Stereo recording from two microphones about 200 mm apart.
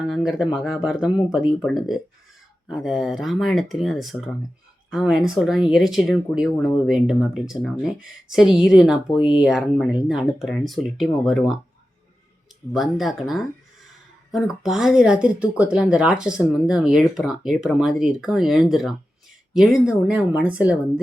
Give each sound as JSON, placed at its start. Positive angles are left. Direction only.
{"t": 0.0, "sound": "speech", "side_deg": -5}
{"t": 12.7, "sound": "speech", "side_deg": 0}